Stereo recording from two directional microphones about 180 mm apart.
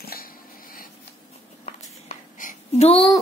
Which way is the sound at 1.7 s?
45° left (ahead or behind).